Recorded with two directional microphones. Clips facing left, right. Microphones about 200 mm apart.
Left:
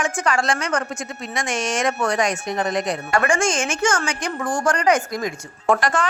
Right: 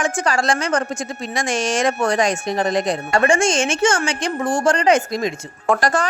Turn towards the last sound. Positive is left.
turn(degrees=-40)  # may be behind; listen again after turning